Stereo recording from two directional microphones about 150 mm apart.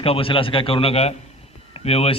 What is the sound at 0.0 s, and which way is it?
A man's voice, 40° left (ahead or behind).